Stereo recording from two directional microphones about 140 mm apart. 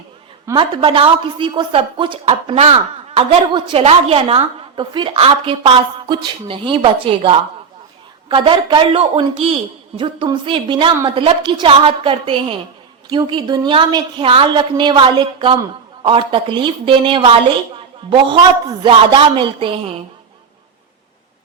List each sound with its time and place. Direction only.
0.5 s a woman's voice: 35° right (ahead or behind)
18.8 s a woman's voice: 35° right (ahead or behind)